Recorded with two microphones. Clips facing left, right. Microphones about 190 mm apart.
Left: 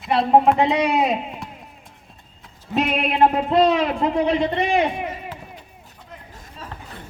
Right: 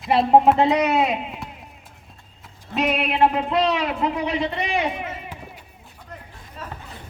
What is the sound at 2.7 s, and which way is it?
Speech, 10° left (ahead or behind).